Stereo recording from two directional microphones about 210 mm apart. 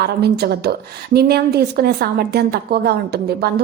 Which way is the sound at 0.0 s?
50° right (ahead or behind).